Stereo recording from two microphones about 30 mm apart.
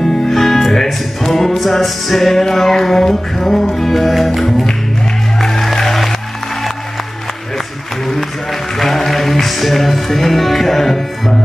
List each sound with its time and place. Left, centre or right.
0.3 s music: centre
8.8 s music: centre